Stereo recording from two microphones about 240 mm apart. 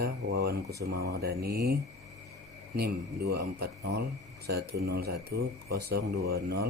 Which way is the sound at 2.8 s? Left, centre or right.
Right.